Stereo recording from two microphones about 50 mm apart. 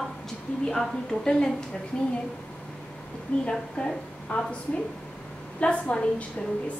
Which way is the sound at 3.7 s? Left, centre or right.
Centre.